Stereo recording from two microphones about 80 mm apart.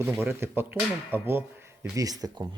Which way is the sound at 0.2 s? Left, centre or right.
Right.